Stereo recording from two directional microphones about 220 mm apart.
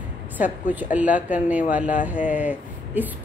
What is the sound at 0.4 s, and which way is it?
Speech, 10° right (ahead or behind).